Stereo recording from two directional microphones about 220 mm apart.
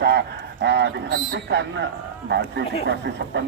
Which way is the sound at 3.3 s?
50° right (ahead or behind).